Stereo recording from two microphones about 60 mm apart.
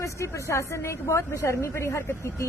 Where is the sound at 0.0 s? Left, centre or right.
Left.